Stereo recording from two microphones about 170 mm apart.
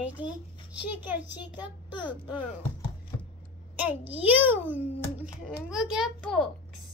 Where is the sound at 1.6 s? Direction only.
25° left (ahead or behind).